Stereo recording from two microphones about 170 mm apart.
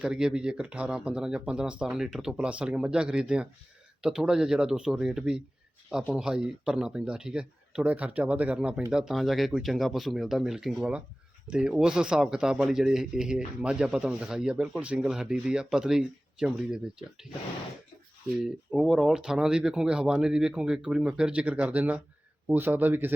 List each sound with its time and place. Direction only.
0.0 s speech: 5° right (ahead or behind)
18.4 s speech: centre (ahead or behind)